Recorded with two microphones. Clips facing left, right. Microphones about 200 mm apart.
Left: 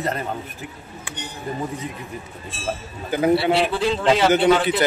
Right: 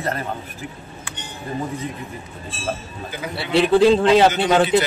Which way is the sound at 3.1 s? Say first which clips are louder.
Left 13 dB; 55° left (ahead or behind).